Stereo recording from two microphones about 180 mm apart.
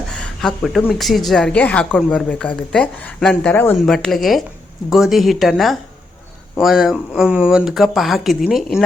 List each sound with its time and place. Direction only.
0.1 s a woman's voice: 5° left (ahead or behind)